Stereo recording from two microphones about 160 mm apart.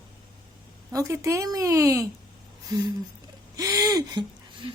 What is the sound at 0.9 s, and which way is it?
Speech, 20° right (ahead or behind).